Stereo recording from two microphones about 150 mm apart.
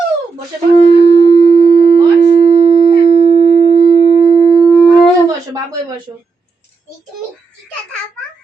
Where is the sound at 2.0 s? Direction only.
35° right (ahead or behind).